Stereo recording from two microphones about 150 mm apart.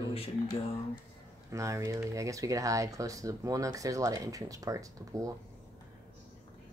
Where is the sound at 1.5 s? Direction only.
20° right (ahead or behind).